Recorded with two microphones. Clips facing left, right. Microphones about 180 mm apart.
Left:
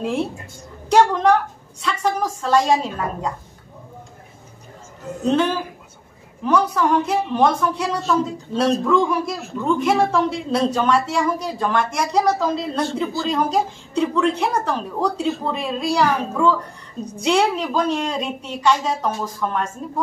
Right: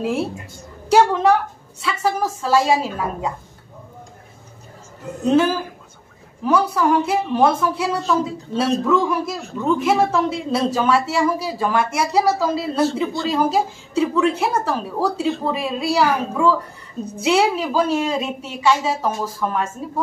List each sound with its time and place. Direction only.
0.0 s a woman's voice: 5° right (ahead or behind)
5.3 s a woman's voice: 5° right (ahead or behind)